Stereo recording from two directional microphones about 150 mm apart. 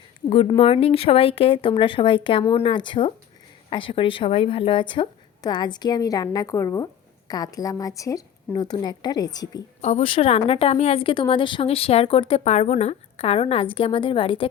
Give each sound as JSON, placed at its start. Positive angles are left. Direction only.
{"t": 0.3, "sound": "a woman's voice", "side_deg": 40}
{"t": 9.8, "sound": "a woman's voice", "side_deg": 40}